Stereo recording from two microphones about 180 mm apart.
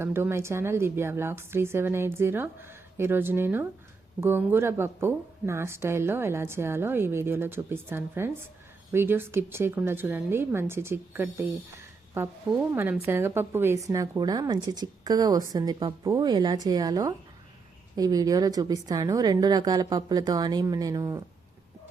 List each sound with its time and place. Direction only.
0.0 s a woman's voice: 15° right (ahead or behind)